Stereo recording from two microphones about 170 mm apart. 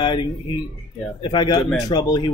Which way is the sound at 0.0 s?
25° left (ahead or behind).